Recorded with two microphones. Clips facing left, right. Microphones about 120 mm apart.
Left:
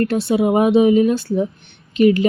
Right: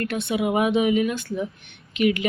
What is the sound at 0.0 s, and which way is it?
Speech, 35° left (ahead or behind).